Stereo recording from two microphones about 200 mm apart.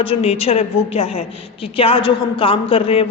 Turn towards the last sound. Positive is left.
turn(degrees=30)  # may be behind; listen again after turning